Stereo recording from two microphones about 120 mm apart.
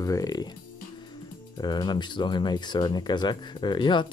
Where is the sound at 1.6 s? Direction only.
40° left (ahead or behind).